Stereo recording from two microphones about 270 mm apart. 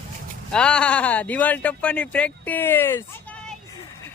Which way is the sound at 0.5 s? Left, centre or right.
Centre.